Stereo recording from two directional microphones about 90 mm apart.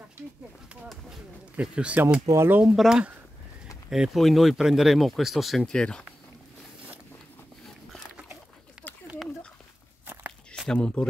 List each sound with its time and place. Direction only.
0.8 s speech: 5° right (ahead or behind)
2.3 s speech: 25° right (ahead or behind)
2.6 s speech: 5° right (ahead or behind)
8.8 s a sound: 20° left (ahead or behind)
10.7 s speech: 10° left (ahead or behind)